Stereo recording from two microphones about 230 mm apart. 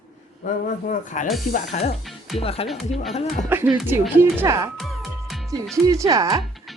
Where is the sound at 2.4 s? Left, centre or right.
Left.